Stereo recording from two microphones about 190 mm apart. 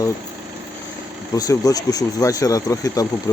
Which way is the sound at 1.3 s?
20° left (ahead or behind).